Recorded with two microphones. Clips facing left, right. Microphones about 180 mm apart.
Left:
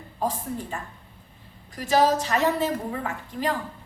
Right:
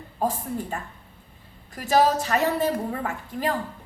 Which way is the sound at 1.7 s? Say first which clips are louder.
Even; 45° right (ahead or behind).